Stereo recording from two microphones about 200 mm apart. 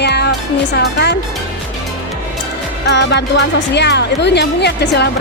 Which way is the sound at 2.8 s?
60° left (ahead or behind).